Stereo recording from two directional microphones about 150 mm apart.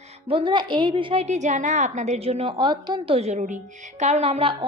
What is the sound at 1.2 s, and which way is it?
A woman's voice, 50° right (ahead or behind).